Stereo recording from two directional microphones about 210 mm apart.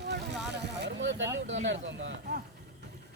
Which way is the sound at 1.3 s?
65° right (ahead or behind).